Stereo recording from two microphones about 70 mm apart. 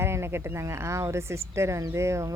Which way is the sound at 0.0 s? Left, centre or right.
Right.